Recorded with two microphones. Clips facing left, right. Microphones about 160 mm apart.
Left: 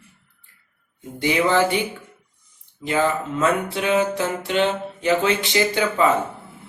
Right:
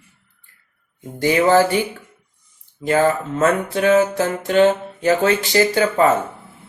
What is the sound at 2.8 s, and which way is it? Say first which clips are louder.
Music: right 4 dB; 45° right (ahead or behind).